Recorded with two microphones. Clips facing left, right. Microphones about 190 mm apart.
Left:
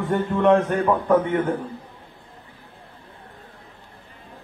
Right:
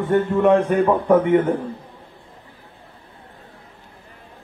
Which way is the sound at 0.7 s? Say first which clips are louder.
Right 3 dB; 20° right (ahead or behind).